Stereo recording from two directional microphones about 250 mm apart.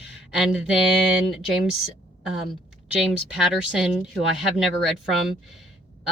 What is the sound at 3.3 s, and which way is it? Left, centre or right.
A woman's voice, centre.